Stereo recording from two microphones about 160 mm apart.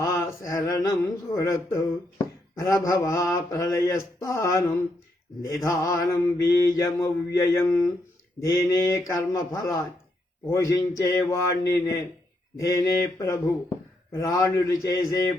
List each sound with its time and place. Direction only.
0.0 s speech: 20° left (ahead or behind)
3.3 s mantra: 25° left (ahead or behind)
5.6 s mantra: 25° left (ahead or behind)